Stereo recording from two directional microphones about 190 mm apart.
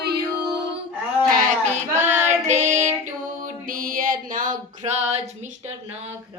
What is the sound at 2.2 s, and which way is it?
Music, 35° right (ahead or behind).